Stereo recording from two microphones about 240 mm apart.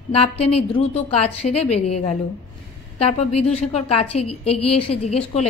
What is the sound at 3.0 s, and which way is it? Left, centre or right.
Speech, left.